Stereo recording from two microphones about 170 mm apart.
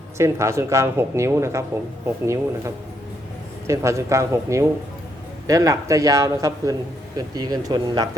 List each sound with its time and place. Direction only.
0.2 s speech: 15° right (ahead or behind)